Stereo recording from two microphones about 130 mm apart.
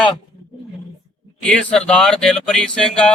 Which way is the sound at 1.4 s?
5° left (ahead or behind).